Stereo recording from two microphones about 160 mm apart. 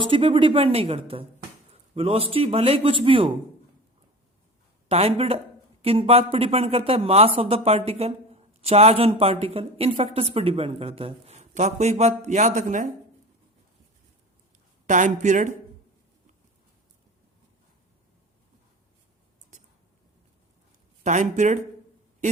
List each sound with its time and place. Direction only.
0.0 s speech: 35° right (ahead or behind)
4.9 s speech: 40° right (ahead or behind)
14.8 s speech: 50° right (ahead or behind)
21.0 s speech: 50° right (ahead or behind)